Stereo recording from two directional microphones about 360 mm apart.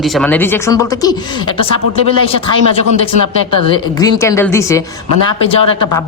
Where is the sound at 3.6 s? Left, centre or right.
Centre.